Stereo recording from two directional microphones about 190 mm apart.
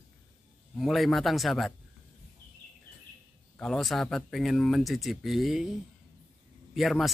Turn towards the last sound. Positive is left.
turn(degrees=0)  # may be behind; listen again after turning